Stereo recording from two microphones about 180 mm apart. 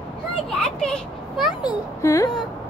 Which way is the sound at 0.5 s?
5° left (ahead or behind).